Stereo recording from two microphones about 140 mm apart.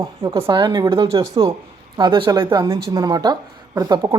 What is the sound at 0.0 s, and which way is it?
Speech, 20° right (ahead or behind).